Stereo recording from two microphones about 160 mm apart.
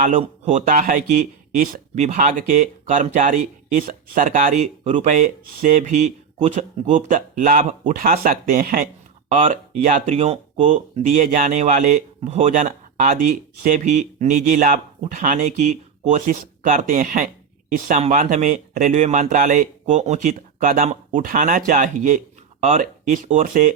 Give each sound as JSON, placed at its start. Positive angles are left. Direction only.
{"t": 0.2, "sound": "speech", "side_deg": -50}
{"t": 9.3, "sound": "speech", "side_deg": -55}
{"t": 13.7, "sound": "speech", "side_deg": -50}